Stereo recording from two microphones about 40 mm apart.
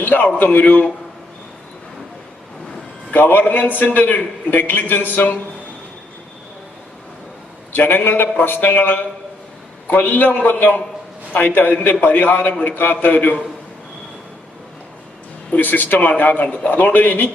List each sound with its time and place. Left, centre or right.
0.1 s a man's voice: left
3.1 s a man's voice: left
7.7 s a man's voice: left
10.1 s a man's voice: left
12.4 s a man's voice: left
12.7 s a man's voice: left
15.5 s a man's voice: left
16.7 s a man's voice: left